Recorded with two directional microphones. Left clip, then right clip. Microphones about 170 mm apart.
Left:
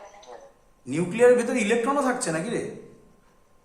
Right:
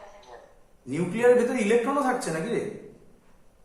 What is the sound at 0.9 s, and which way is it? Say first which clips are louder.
A man's voice: left 2 dB; 50° left (ahead or behind).